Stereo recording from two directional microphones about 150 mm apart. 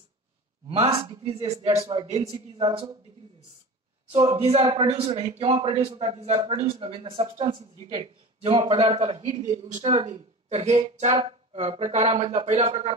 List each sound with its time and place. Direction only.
0.7 s speech: 45° right (ahead or behind)
0.9 s a man's voice: 35° right (ahead or behind)
4.4 s a man's voice: 40° right (ahead or behind)
9.4 s speech: 50° right (ahead or behind)
9.8 s speech: 40° right (ahead or behind)